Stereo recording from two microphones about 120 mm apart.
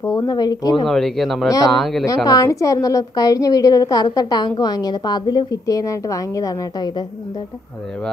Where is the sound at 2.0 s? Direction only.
30° left (ahead or behind).